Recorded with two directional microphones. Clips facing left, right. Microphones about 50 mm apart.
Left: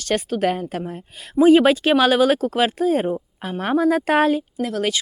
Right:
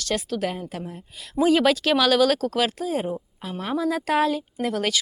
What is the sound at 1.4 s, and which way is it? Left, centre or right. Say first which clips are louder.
Speech: left 6 dB; left.